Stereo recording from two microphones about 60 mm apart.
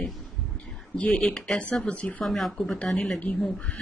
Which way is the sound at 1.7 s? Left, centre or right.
Left.